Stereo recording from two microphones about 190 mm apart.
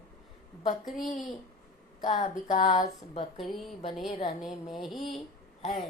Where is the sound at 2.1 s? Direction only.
45° left (ahead or behind).